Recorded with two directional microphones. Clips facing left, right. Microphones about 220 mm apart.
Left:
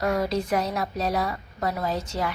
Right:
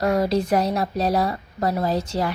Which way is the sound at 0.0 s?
35° right (ahead or behind).